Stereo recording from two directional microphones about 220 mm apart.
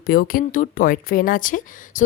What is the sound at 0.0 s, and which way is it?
Speech, 45° left (ahead or behind).